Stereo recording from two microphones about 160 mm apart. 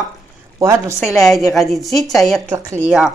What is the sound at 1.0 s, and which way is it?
A woman's voice, centre (ahead or behind).